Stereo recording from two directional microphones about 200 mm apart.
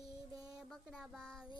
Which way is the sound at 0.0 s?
15° right (ahead or behind).